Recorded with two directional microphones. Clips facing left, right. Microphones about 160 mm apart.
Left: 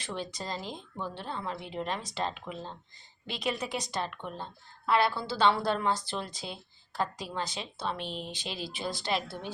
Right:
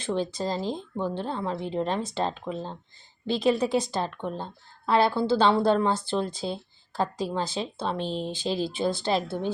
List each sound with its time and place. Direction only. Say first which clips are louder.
0.0 s a woman's voice: right 9 dB; 30° right (ahead or behind)